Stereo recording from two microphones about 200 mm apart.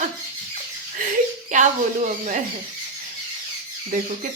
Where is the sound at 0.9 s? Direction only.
40° right (ahead or behind).